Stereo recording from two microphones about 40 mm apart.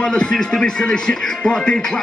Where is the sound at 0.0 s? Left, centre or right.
Centre.